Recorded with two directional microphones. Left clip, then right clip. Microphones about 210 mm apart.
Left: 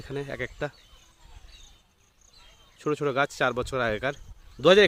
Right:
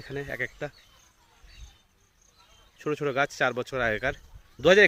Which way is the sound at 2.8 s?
15° left (ahead or behind).